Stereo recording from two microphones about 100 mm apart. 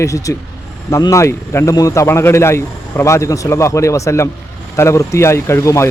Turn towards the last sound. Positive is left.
turn(degrees=30)  # may be behind; listen again after turning